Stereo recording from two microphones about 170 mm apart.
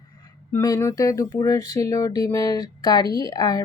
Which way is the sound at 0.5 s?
20° left (ahead or behind).